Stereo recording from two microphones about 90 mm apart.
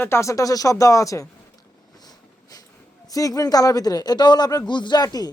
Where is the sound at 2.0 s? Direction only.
45° left (ahead or behind).